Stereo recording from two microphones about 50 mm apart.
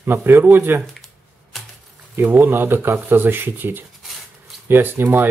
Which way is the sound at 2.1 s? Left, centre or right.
Right.